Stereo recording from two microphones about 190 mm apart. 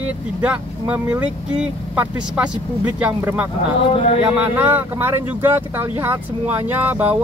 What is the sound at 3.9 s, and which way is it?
Speech, 30° left (ahead or behind).